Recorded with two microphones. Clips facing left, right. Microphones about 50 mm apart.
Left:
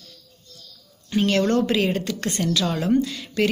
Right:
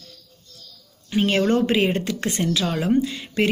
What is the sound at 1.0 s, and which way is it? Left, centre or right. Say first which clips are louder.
A woman's voice: right 1 dB; centre.